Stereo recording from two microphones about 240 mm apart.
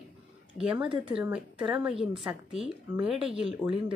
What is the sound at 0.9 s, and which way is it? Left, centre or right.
Speech, right.